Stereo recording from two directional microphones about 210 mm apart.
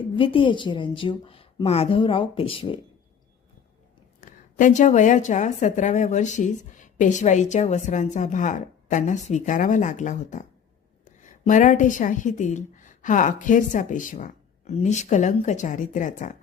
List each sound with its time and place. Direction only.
0.0 s speech: 25° left (ahead or behind)
4.2 s a woman's voice: 35° left (ahead or behind)